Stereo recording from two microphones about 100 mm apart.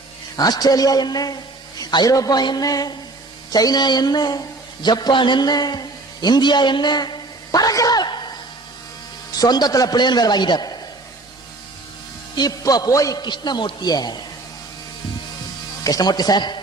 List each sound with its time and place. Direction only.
0.3 s a man's voice: 40° left (ahead or behind)
9.3 s speech: 40° left (ahead or behind)
12.4 s speech: 40° left (ahead or behind)
15.8 s speech: 40° left (ahead or behind)